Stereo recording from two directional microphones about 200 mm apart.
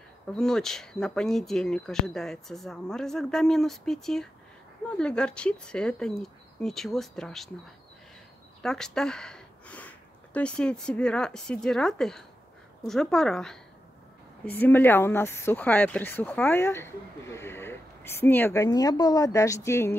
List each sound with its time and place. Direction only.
0.3 s speech: 5° left (ahead or behind)
8.6 s speech: 5° left (ahead or behind)